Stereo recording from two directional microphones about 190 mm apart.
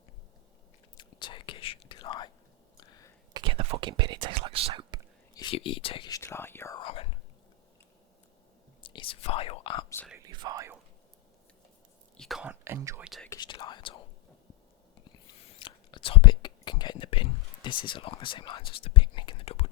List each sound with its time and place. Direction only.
0.9 s whispering: 25° left (ahead or behind)
2.8 s a sound: 20° left (ahead or behind)
3.3 s speech: 25° right (ahead or behind)
5.3 s speech: 25° left (ahead or behind)
6.7 s speech: 30° left (ahead or behind)
8.8 s speech: 25° left (ahead or behind)
10.1 s whispering: 15° right (ahead or behind)
12.1 s speech: centre (ahead or behind)
13.1 s speech: centre (ahead or behind)
13.3 s speech: 20° left (ahead or behind)
15.5 s whispering: 25° left (ahead or behind)